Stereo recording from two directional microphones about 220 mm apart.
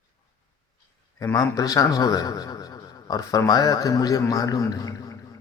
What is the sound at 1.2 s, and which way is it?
A man's voice, 15° left (ahead or behind).